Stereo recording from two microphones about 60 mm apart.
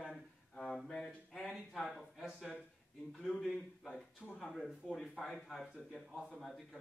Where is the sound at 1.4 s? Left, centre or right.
Centre.